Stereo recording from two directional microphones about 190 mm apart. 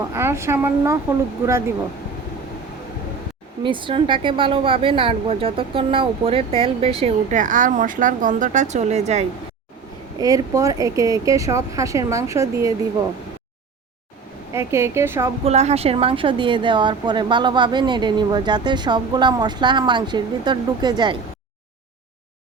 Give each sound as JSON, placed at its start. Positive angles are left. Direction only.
{"t": 0.1, "sound": "speech", "side_deg": -15}
{"t": 3.6, "sound": "speech", "side_deg": -25}
{"t": 10.2, "sound": "speech", "side_deg": -20}
{"t": 14.5, "sound": "speech", "side_deg": -15}
{"t": 15.4, "sound": "speech", "side_deg": -35}